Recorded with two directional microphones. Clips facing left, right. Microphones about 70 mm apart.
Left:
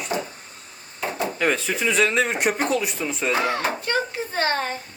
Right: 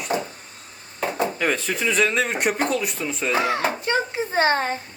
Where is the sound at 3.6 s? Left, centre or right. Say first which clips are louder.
Right 1 dB; right.